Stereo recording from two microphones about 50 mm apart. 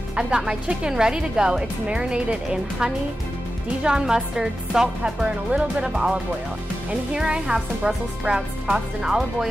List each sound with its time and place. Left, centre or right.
0.1 s music: centre
0.5 s speech: centre